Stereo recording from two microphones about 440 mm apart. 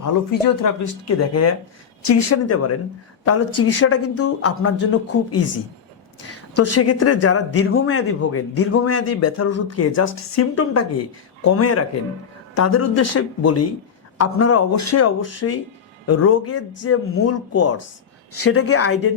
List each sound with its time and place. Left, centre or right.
0.0 s speech: left
6.5 s speech: left